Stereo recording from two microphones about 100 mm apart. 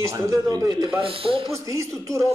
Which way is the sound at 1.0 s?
65° right (ahead or behind).